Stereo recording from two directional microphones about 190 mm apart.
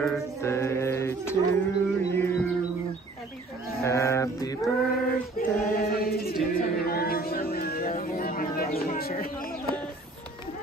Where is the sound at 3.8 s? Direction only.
15° left (ahead or behind).